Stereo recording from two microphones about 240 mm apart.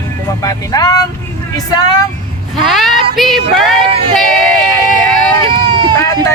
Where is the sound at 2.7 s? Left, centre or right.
Centre.